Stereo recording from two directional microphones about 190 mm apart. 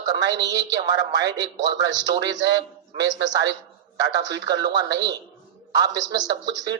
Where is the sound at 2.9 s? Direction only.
20° right (ahead or behind).